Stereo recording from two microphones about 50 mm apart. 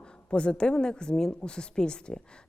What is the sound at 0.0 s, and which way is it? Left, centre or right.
A woman's voice, left.